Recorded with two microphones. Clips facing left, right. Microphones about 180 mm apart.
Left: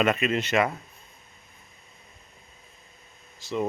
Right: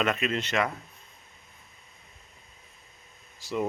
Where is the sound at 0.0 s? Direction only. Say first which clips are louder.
Left 4 dB; 5° left (ahead or behind).